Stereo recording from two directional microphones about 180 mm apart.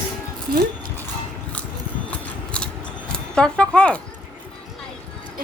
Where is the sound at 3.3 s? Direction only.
5° left (ahead or behind).